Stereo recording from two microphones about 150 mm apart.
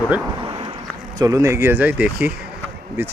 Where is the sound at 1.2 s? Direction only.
20° right (ahead or behind).